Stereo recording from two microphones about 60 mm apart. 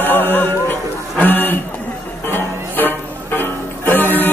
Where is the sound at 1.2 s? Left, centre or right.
Left.